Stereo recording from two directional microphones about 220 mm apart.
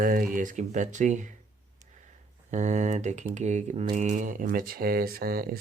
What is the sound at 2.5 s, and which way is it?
Speech, 35° right (ahead or behind).